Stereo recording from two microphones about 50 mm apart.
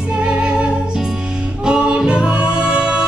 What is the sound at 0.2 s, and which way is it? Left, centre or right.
Music, right.